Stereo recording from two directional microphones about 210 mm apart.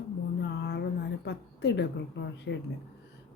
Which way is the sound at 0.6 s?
55° left (ahead or behind).